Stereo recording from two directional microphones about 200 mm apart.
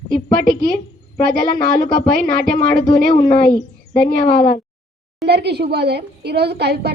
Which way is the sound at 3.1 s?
25° left (ahead or behind).